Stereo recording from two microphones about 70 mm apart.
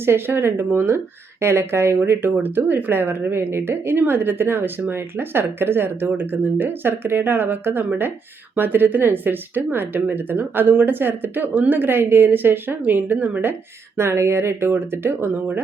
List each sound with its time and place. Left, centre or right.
0.0 s a woman's voice: right
13.5 s speech: right